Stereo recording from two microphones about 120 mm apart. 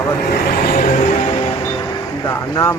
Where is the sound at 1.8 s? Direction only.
25° left (ahead or behind).